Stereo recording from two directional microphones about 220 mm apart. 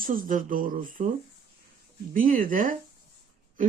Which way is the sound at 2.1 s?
40° right (ahead or behind).